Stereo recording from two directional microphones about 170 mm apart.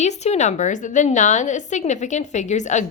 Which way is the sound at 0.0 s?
40° left (ahead or behind).